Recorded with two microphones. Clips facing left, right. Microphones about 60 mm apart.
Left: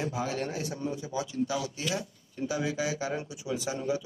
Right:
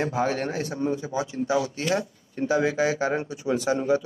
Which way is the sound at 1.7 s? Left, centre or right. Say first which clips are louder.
Right 7 dB; right.